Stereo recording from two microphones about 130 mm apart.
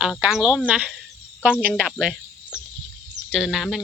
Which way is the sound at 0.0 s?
5° right (ahead or behind).